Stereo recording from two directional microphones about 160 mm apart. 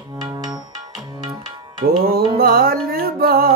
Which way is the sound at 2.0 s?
70° right (ahead or behind).